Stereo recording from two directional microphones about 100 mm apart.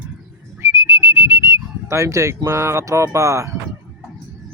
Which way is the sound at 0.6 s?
25° right (ahead or behind).